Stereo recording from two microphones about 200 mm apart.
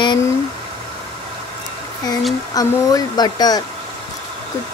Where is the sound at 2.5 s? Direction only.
20° left (ahead or behind).